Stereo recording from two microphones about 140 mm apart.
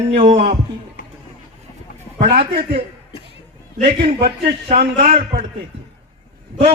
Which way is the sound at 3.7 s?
65° right (ahead or behind).